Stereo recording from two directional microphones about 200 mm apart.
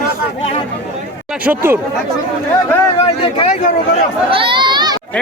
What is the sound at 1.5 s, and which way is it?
Speech, 10° right (ahead or behind).